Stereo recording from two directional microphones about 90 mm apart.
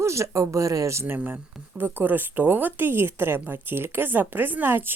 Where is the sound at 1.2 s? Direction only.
20° right (ahead or behind).